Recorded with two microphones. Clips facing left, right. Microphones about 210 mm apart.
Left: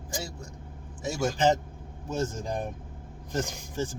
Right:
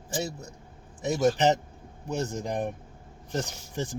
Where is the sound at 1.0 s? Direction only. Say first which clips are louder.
Right 2 dB; 20° right (ahead or behind).